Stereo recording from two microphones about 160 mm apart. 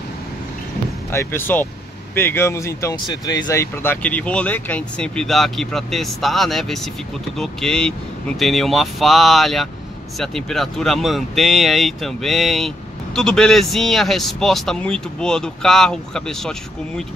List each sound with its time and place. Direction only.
1.1 s speech: 15° left (ahead or behind)
3.8 s speech: 10° left (ahead or behind)